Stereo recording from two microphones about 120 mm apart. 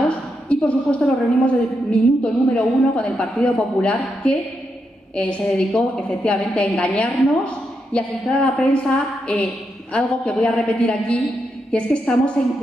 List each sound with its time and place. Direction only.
0.5 s a woman's voice: 10° left (ahead or behind)